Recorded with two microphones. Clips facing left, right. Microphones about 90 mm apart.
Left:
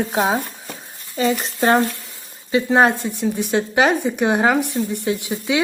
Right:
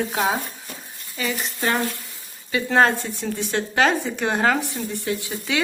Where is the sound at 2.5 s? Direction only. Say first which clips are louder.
Left 3 dB; 20° left (ahead or behind).